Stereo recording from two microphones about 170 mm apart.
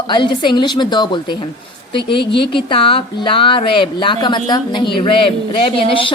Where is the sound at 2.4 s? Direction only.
30° left (ahead or behind).